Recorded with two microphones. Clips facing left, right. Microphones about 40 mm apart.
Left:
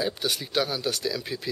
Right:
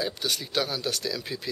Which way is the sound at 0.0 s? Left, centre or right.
Centre.